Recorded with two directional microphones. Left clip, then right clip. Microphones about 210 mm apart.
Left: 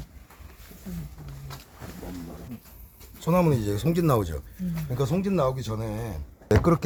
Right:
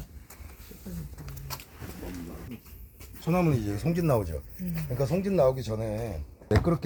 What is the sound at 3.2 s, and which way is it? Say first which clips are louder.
Speech: left 4 dB; 50° left (ahead or behind).